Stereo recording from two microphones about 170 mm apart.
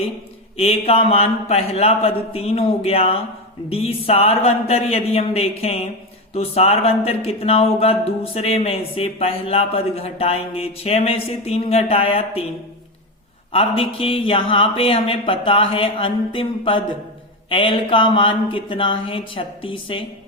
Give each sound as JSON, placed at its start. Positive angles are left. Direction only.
{"t": 0.5, "sound": "speech", "side_deg": 35}
{"t": 13.5, "sound": "speech", "side_deg": 35}